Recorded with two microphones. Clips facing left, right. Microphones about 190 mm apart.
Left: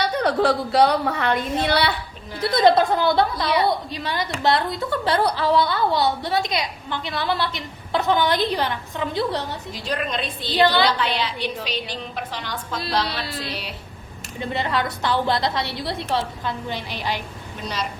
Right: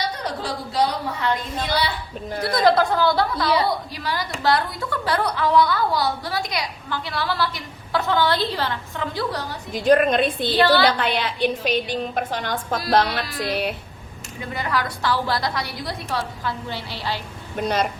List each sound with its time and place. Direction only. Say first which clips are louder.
0.0 s a woman's voice: left 8 dB; 65° left (ahead or behind)
2.6 s a woman's voice: left 1 dB; 25° left (ahead or behind)
9.7 s a woman's voice: right 11 dB; 50° right (ahead or behind)
14.5 s a woman's voice: left 1 dB; 25° left (ahead or behind)
17.6 s a woman's voice: right 7 dB; 55° right (ahead or behind)